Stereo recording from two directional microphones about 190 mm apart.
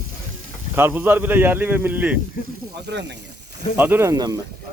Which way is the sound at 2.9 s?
65° right (ahead or behind).